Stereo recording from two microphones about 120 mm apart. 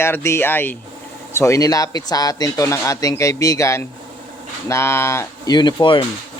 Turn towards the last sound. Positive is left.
turn(degrees=40)  # may be behind; listen again after turning